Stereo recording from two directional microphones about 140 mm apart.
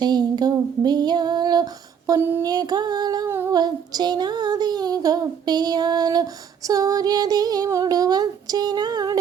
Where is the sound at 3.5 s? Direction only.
30° right (ahead or behind).